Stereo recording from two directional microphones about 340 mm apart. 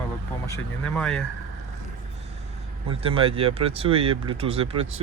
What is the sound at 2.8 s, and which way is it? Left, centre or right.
Speech, centre.